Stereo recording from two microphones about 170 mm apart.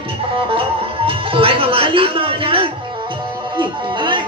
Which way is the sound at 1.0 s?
30° right (ahead or behind).